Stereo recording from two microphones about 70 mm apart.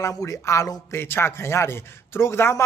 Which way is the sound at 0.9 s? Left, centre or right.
Left.